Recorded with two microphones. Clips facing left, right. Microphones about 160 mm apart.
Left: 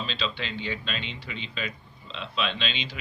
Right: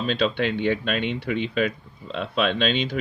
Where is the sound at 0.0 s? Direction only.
55° right (ahead or behind).